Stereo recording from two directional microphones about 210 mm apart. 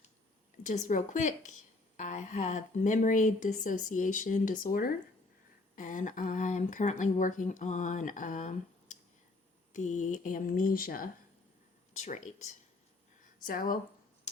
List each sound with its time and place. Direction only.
0.6 s speech: 35° left (ahead or behind)
13.4 s speech: 40° left (ahead or behind)